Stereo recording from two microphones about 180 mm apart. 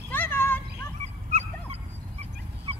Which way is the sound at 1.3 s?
35° right (ahead or behind).